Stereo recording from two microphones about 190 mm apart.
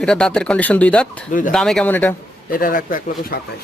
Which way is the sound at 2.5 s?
45° left (ahead or behind).